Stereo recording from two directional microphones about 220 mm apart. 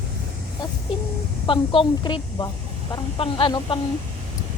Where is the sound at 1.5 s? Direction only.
25° left (ahead or behind).